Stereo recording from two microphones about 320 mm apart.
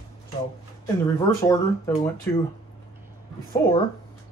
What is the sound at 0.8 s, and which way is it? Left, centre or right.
Speech, centre.